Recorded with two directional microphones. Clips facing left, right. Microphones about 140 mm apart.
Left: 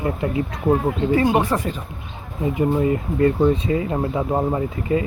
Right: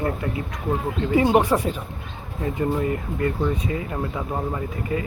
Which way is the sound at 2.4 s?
15° left (ahead or behind).